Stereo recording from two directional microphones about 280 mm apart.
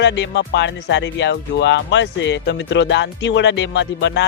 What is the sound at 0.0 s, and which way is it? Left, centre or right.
Speech, left.